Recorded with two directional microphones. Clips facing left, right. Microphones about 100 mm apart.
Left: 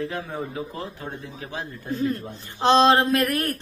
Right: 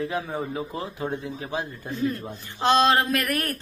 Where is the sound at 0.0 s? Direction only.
5° right (ahead or behind).